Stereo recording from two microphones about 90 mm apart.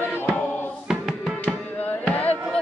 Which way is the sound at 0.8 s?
5° right (ahead or behind).